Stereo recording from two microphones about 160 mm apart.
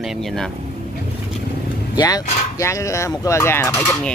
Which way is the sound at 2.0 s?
25° left (ahead or behind).